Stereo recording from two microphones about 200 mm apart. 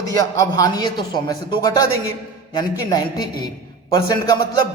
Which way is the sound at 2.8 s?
20° left (ahead or behind).